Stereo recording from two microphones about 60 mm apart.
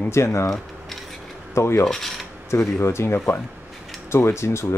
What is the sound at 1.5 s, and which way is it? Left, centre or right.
Filing, left.